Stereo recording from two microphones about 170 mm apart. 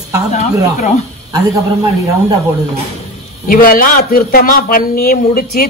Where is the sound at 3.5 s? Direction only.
55° left (ahead or behind).